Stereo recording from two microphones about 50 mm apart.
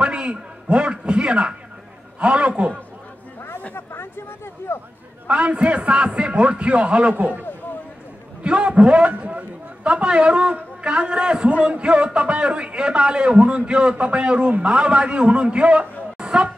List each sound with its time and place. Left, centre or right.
0.0 s a man's voice: right
3.7 s a sound: left
4.7 s a man's voice: left
5.3 s a man's voice: right
8.5 s a man's voice: right